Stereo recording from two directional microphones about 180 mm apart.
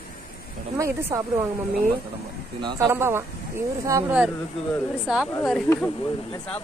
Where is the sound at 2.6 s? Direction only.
25° right (ahead or behind).